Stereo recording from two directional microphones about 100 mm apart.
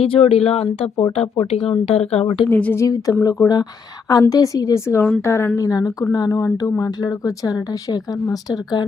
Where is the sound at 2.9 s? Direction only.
40° left (ahead or behind).